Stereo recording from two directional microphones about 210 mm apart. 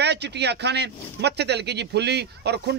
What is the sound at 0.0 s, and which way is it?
Speech, 55° right (ahead or behind).